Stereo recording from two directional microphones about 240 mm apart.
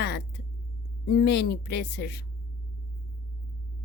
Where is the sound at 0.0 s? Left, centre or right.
Left.